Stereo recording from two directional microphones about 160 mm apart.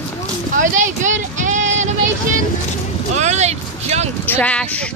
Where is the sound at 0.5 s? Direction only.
50° right (ahead or behind).